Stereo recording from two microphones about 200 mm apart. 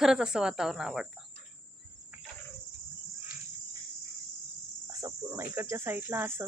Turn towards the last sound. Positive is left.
turn(degrees=-10)  # may be behind; listen again after turning